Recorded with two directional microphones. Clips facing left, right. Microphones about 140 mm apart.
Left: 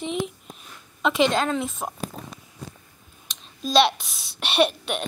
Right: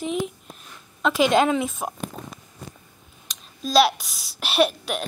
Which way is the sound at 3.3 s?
Centre (ahead or behind).